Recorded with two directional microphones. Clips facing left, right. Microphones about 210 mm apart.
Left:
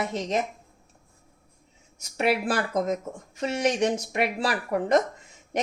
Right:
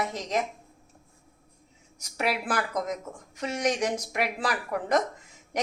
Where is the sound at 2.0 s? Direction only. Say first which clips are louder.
Left 5 dB; 25° left (ahead or behind).